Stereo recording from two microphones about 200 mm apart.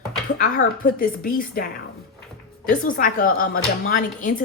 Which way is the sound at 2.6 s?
45° left (ahead or behind).